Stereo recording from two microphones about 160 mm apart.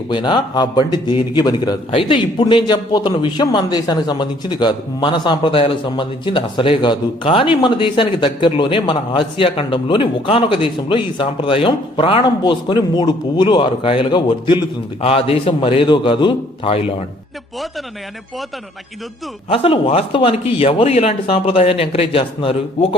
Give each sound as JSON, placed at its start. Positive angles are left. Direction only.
{"t": 0.1, "sound": "a man's voice", "side_deg": 30}
{"t": 19.5, "sound": "a man's voice", "side_deg": 35}